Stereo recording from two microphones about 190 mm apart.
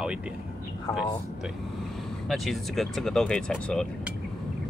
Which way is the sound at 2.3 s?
Centre (ahead or behind).